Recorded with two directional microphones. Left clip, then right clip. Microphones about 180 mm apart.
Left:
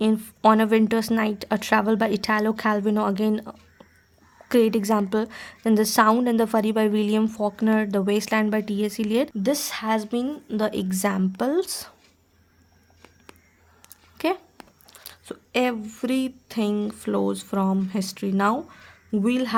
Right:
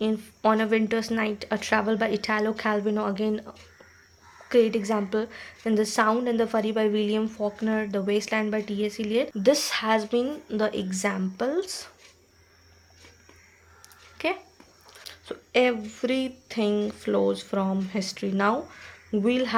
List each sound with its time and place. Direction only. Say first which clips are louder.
0.0 s a woman's voice: left 5 dB; 45° left (ahead or behind)
9.4 s speech: right 3 dB; 25° left (ahead or behind)
14.2 s speech: left 3 dB; 40° left (ahead or behind)